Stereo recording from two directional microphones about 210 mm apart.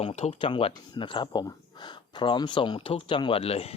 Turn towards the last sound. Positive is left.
turn(degrees=30)  # may be behind; listen again after turning